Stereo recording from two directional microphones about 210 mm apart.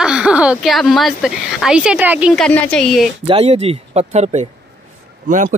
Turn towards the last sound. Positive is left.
turn(degrees=-35)  # may be behind; listen again after turning